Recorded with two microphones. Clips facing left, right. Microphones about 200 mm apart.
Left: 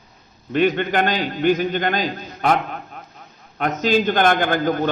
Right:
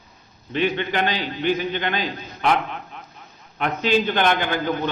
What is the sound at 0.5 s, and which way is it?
A man's voice, 45° left (ahead or behind).